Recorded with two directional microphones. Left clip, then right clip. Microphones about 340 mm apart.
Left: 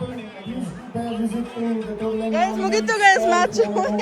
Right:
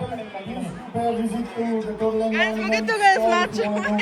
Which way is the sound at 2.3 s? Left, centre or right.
Centre.